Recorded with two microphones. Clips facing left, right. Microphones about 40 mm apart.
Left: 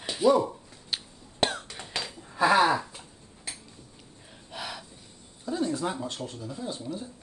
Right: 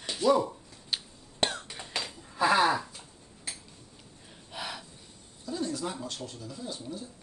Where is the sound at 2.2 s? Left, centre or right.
Centre.